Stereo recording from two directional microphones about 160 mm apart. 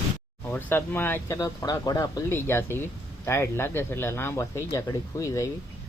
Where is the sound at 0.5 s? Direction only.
10° left (ahead or behind).